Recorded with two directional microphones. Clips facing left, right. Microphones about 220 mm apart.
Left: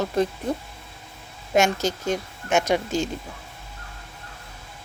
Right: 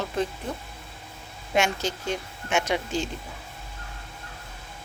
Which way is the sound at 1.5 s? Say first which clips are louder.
Left 4 dB; 45° left (ahead or behind).